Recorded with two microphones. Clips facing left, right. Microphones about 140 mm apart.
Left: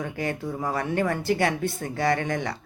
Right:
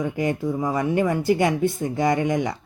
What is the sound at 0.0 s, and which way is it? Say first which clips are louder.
Speech: right 6 dB; 20° right (ahead or behind).